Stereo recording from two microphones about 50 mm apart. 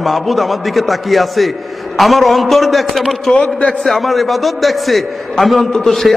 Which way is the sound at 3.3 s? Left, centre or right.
Left.